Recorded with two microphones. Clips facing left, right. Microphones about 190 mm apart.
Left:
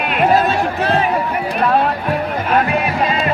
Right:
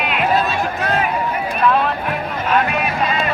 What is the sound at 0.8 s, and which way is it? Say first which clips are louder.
Run: left 3 dB; 30° left (ahead or behind).